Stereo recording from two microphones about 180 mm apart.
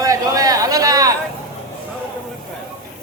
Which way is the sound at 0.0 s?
20° right (ahead or behind).